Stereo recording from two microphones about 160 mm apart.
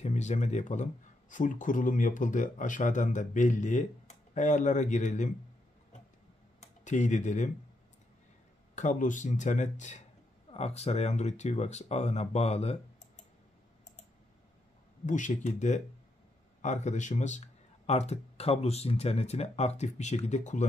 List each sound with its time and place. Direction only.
0.0 s speech: 45° left (ahead or behind)
6.6 s speech: 50° left (ahead or behind)
8.7 s speech: 50° left (ahead or behind)
15.0 s speech: 50° left (ahead or behind)